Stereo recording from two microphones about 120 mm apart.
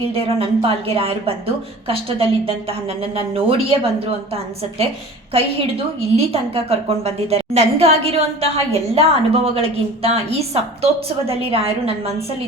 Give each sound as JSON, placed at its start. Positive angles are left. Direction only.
{"t": 0.1, "sound": "speech", "side_deg": -50}
{"t": 5.3, "sound": "a woman's voice", "side_deg": -55}